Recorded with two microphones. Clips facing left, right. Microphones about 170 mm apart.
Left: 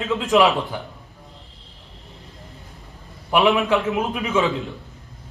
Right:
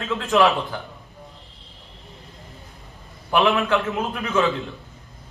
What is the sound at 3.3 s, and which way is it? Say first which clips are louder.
Speech: left 2 dB; 15° left (ahead or behind).